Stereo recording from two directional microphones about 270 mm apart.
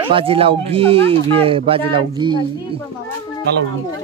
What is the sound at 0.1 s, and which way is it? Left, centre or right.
Speech, right.